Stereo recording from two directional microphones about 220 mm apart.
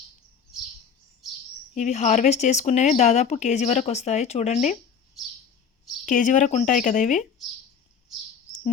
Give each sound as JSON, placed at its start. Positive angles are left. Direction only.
{"t": 1.7, "sound": "speech", "side_deg": 30}
{"t": 6.1, "sound": "speech", "side_deg": 35}